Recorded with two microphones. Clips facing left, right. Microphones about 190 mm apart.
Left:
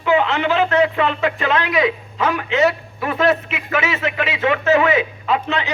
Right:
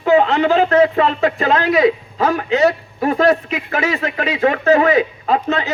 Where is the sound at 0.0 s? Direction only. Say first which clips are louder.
Right 4 dB; 40° right (ahead or behind).